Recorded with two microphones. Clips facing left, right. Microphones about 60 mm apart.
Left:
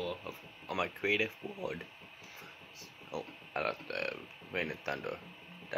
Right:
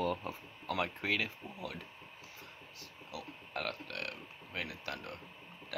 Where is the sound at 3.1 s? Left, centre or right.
Left.